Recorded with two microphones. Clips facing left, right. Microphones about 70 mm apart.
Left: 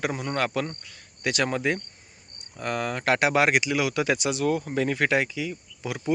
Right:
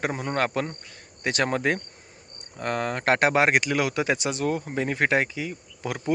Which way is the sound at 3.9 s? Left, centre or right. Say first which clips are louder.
Left 1 dB; right.